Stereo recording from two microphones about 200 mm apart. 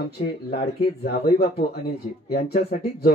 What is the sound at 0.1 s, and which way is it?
Speech, 55° left (ahead or behind).